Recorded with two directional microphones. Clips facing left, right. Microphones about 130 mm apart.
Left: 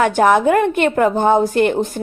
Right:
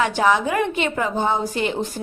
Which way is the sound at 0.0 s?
50° left (ahead or behind).